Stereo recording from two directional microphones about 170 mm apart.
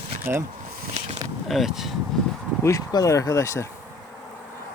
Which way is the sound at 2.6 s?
20° left (ahead or behind).